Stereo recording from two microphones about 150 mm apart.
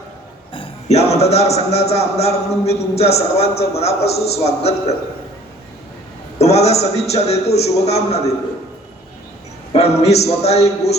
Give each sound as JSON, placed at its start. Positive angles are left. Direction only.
{"t": 0.5, "sound": "a man's voice", "side_deg": 40}
{"t": 6.4, "sound": "a man's voice", "side_deg": 45}
{"t": 9.7, "sound": "a man's voice", "side_deg": 45}